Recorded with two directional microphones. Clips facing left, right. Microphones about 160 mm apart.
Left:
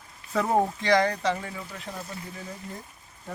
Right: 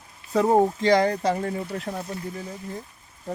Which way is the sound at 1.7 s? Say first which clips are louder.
Right 8 dB; 65° right (ahead or behind).